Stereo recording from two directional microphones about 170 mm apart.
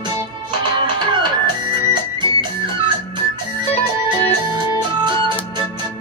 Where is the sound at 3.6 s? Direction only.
35° left (ahead or behind).